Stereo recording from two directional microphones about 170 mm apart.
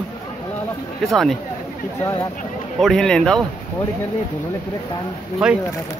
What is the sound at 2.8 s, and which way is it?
Speech, 5° left (ahead or behind).